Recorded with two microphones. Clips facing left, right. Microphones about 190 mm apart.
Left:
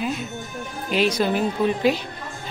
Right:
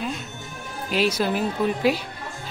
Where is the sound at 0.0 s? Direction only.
5° left (ahead or behind).